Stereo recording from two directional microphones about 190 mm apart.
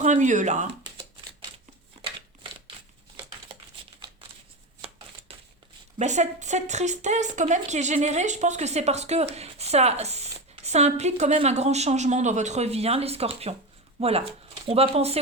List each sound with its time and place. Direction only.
0.0 s speech: 40° right (ahead or behind)
2.0 s scissors: 25° right (ahead or behind)
6.0 s speech: 40° right (ahead or behind)